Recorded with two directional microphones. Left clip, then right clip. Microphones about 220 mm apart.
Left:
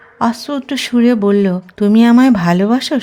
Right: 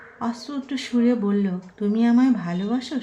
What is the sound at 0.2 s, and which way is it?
Speech, 50° left (ahead or behind).